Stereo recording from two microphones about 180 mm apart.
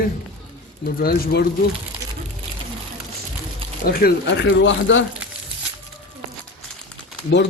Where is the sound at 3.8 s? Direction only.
55° left (ahead or behind); by 5.0 s 90° left.